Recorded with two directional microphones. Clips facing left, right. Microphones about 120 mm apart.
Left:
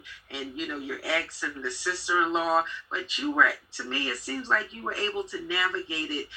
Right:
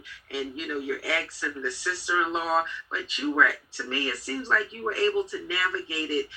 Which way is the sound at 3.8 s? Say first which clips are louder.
Right 2 dB; 15° left (ahead or behind).